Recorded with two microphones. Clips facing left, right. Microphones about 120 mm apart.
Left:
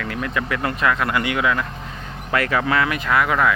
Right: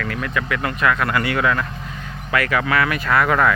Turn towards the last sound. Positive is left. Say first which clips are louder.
# right 1 dB
turn(degrees=5)  # may be behind; listen again after turning